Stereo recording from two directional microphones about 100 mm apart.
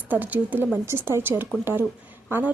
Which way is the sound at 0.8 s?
25° right (ahead or behind).